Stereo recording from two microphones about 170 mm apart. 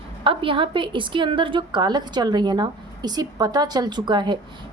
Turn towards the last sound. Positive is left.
turn(degrees=-25)  # may be behind; listen again after turning